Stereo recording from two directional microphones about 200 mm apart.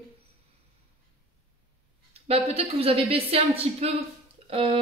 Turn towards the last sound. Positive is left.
turn(degrees=-25)  # may be behind; listen again after turning